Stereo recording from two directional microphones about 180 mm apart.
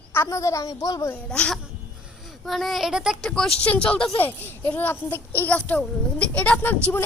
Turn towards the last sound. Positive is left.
turn(degrees=10)  # may be behind; listen again after turning